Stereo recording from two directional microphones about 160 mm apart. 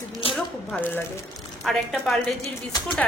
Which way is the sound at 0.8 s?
10° left (ahead or behind).